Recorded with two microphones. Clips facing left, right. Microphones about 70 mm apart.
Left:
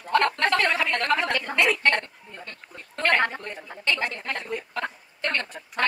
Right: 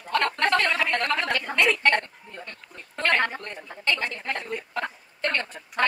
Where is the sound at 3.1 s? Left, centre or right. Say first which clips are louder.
Left 1 dB; centre.